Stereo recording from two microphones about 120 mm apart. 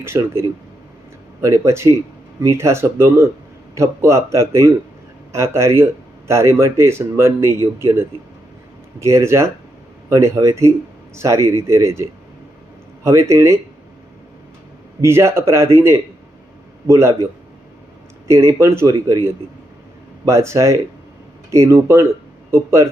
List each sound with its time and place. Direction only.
0.0 s speech: 20° right (ahead or behind)
13.1 s speech: 25° right (ahead or behind)
15.0 s speech: 20° right (ahead or behind)
18.3 s speech: 25° right (ahead or behind)